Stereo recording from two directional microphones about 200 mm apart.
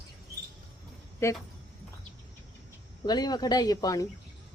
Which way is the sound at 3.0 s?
20° left (ahead or behind).